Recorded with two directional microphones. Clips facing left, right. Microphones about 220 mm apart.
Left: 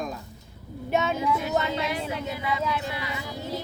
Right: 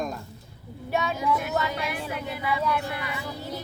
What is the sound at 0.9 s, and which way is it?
Speech, 20° left (ahead or behind).